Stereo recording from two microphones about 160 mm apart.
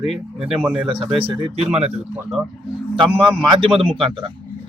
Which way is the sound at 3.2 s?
35° right (ahead or behind).